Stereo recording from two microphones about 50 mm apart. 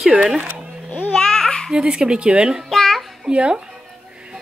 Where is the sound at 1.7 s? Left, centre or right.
Centre.